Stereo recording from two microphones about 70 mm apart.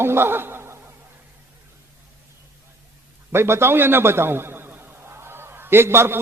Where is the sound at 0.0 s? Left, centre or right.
Right.